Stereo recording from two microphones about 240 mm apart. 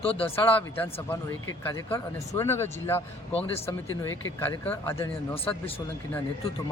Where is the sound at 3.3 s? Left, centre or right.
Left.